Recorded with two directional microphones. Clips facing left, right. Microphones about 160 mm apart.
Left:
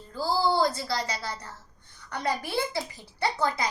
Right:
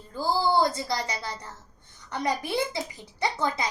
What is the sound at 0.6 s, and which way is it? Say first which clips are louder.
A woman's voice: even; 20° right (ahead or behind).